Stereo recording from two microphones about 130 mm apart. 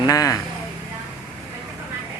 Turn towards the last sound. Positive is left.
turn(degrees=25)  # may be behind; listen again after turning